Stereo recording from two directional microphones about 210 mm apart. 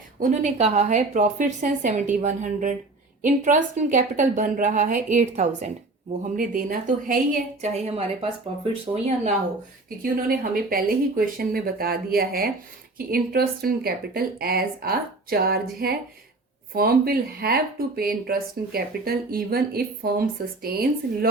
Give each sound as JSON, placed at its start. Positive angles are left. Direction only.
{"t": 0.2, "sound": "a woman's voice", "side_deg": -35}
{"t": 7.6, "sound": "speech", "side_deg": -30}
{"t": 10.0, "sound": "speech", "side_deg": -45}